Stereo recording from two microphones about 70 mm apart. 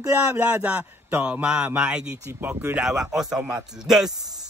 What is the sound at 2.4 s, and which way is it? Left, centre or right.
Speech, right.